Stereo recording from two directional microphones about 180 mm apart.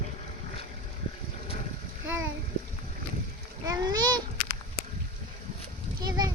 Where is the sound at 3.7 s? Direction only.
20° right (ahead or behind).